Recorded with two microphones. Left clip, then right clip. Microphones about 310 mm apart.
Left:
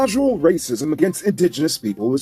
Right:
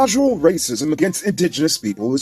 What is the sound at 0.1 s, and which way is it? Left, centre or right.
Speech, centre.